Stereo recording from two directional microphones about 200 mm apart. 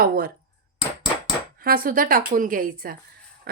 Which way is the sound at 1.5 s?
45° right (ahead or behind).